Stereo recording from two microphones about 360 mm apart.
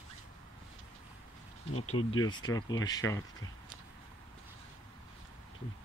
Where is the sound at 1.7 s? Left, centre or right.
Left.